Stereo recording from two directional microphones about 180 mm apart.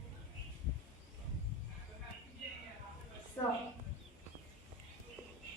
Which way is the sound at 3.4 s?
15° left (ahead or behind).